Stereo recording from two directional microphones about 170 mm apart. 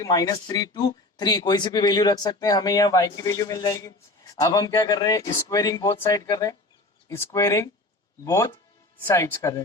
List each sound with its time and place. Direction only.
0.0 s speech: 20° left (ahead or behind)